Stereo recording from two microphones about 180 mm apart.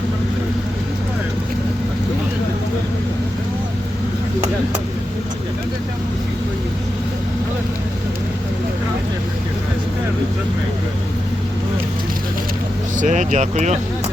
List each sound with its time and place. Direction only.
13.0 s speech: 45° right (ahead or behind)